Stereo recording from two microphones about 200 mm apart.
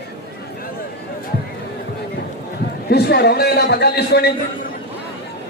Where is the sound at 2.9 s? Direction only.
55° left (ahead or behind).